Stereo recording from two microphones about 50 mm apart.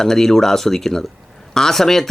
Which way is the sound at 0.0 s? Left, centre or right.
Centre.